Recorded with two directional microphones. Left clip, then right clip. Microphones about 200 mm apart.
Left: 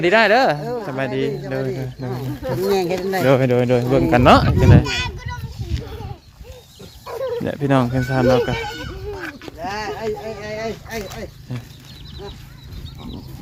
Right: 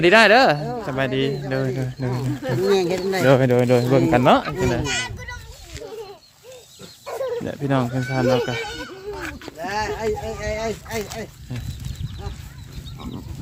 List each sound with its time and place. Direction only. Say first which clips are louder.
0.0 s speech: right 1 dB; 35° right (ahead or behind)
2.7 s speech: left 1 dB; 5° right (ahead or behind)
4.1 s speech: left 6 dB; 15° left (ahead or behind)
4.8 s children playing: left 2 dB; 25° right (ahead or behind)
7.0 s wild animals: left 1 dB; 20° right (ahead or behind)
7.4 s speech: left 4 dB; 20° left (ahead or behind)
8.5 s a sound: left 2 dB; 10° right (ahead or behind)
9.6 s a sound: right 1 dB; 65° right (ahead or behind)